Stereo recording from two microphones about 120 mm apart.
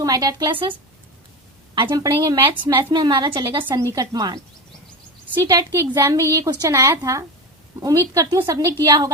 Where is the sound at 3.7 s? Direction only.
30° right (ahead or behind).